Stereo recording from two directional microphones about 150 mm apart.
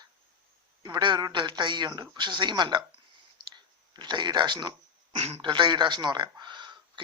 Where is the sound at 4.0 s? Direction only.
30° right (ahead or behind).